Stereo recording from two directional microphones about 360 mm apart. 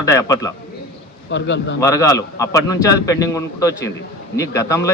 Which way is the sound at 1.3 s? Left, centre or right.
Left.